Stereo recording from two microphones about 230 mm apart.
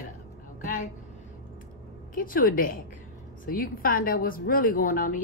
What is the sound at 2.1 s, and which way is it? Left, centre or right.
A woman's voice, left.